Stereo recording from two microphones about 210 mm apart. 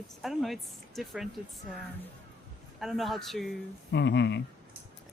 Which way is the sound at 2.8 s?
Centre (ahead or behind).